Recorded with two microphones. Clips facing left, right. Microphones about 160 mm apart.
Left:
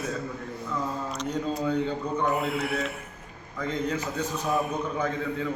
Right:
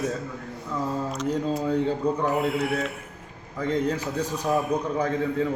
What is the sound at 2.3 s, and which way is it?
Speech, centre (ahead or behind).